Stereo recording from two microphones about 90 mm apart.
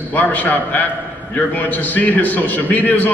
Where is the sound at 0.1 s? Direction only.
20° left (ahead or behind).